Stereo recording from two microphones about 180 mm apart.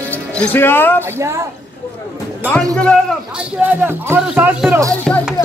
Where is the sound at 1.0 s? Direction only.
15° right (ahead or behind).